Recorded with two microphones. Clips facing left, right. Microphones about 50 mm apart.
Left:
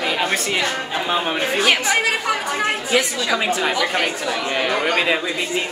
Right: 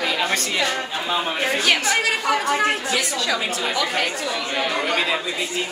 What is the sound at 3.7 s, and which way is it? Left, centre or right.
Speech, centre.